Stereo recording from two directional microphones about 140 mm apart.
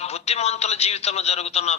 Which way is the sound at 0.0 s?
50° left (ahead or behind).